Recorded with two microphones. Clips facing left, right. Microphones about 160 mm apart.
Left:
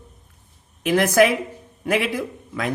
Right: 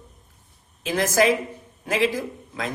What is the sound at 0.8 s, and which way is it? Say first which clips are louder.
A man's voice: left 4 dB; 65° left (ahead or behind).